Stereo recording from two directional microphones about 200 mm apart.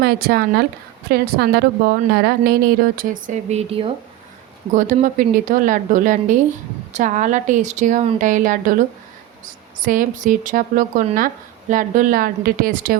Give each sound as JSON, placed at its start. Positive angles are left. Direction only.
{"t": 0.0, "sound": "a woman's voice", "side_deg": -50}
{"t": 4.7, "sound": "a woman's voice", "side_deg": -40}
{"t": 9.8, "sound": "a woman's voice", "side_deg": -40}